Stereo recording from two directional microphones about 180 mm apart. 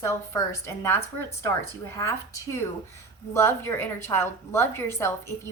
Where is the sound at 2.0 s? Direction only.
15° left (ahead or behind).